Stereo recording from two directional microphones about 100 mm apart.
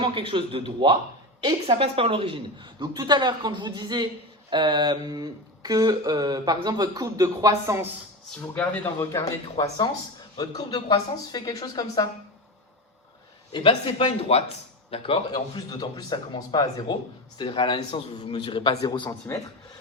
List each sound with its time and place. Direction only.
0.0 s a woman's voice: 60° right (ahead or behind); by 7.8 s 35° right (ahead or behind)
8.5 s speech: 15° left (ahead or behind)
9.0 s speech: 30° left (ahead or behind)
9.6 s speech: 40° left (ahead or behind)
13.5 s a man's voice: 55° left (ahead or behind)
15.3 s speech: 45° left (ahead or behind)
19.3 s speech: 25° left (ahead or behind)